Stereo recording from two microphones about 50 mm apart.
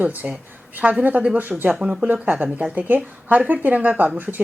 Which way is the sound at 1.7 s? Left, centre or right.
Centre.